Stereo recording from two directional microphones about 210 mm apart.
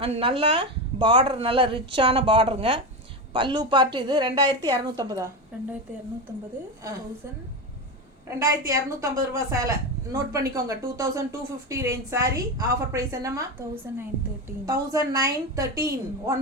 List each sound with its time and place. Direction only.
0.0 s a woman's voice: 25° right (ahead or behind)
8.4 s a woman's voice: 15° right (ahead or behind)
14.6 s a woman's voice: 15° right (ahead or behind)